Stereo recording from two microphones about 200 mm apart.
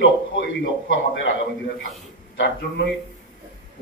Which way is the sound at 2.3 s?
60° left (ahead or behind).